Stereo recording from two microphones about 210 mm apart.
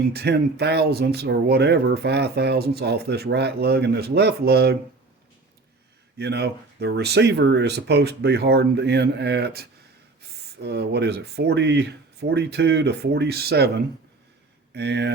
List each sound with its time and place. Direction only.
0.1 s speech: 50° right (ahead or behind)
6.1 s speech: 50° right (ahead or behind)